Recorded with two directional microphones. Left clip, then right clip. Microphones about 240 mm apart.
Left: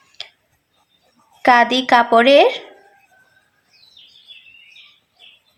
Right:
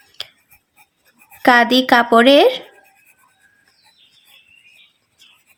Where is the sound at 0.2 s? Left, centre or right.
Right.